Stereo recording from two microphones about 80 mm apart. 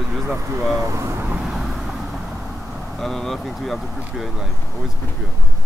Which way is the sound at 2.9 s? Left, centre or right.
Centre.